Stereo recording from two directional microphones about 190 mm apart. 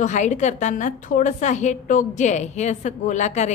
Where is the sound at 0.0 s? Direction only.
40° left (ahead or behind).